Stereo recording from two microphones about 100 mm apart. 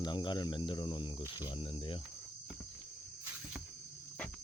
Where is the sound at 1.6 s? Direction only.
60° left (ahead or behind).